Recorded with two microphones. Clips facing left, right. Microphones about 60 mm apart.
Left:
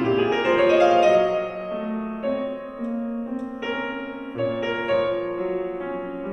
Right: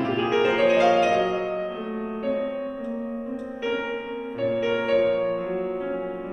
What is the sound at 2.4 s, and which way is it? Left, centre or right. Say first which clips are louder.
Music: even; centre.